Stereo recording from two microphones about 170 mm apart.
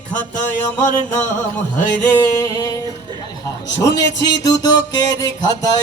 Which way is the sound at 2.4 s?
20° left (ahead or behind).